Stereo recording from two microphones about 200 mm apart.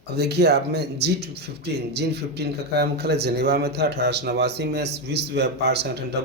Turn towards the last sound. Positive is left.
turn(degrees=-55)  # may be behind; listen again after turning